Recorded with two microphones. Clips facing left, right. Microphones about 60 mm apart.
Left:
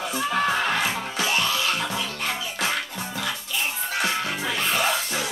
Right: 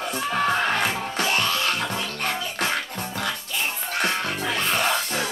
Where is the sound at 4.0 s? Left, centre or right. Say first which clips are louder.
Right 1 dB; right.